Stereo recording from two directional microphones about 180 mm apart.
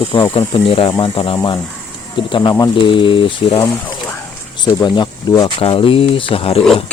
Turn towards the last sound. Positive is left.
turn(degrees=30)  # may be behind; listen again after turning